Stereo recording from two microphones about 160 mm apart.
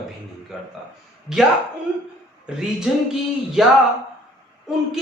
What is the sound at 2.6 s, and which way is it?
Speech, 5° right (ahead or behind).